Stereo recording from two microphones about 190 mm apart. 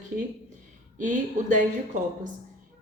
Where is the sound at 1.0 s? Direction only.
40° right (ahead or behind).